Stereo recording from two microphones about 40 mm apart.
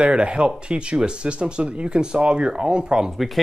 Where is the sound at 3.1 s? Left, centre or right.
Centre.